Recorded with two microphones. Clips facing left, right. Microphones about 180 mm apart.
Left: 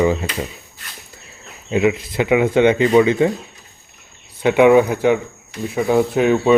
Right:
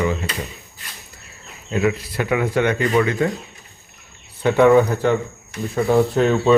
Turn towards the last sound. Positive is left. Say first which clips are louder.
# left 1 dB
turn(degrees=10)  # may be behind; listen again after turning